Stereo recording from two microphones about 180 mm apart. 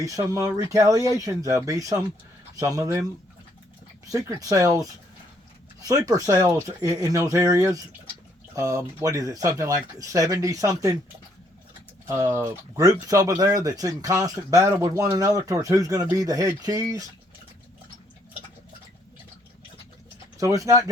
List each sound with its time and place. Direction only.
0.0 s speech: 20° right (ahead or behind)
4.0 s speech: 20° right (ahead or behind)
5.9 s speech: 20° right (ahead or behind)
12.0 s speech: 15° right (ahead or behind)
20.4 s speech: 20° right (ahead or behind)